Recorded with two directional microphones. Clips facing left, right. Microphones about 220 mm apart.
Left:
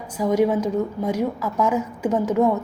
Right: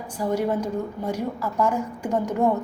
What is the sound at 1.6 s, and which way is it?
Speech, 5° left (ahead or behind).